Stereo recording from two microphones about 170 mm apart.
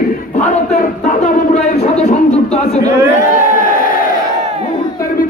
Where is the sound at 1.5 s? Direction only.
40° left (ahead or behind).